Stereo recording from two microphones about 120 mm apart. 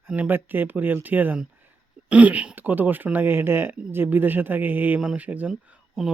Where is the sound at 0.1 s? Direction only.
15° right (ahead or behind).